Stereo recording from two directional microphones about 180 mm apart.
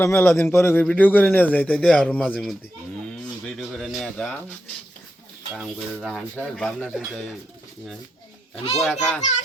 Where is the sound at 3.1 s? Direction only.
Centre (ahead or behind).